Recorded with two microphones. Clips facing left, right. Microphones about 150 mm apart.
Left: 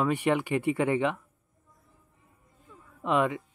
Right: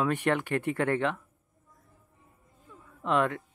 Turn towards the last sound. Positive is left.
turn(degrees=5)  # may be behind; listen again after turning